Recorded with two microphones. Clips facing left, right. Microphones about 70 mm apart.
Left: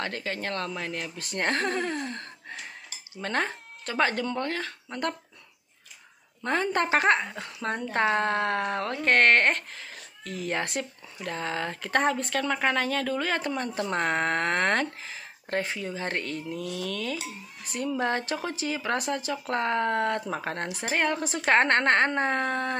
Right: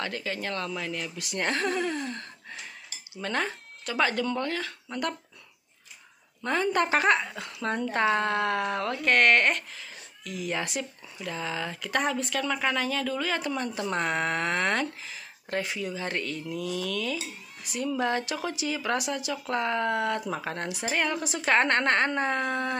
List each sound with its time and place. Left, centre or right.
0.0 s a woman's voice: left
6.4 s a woman's voice: left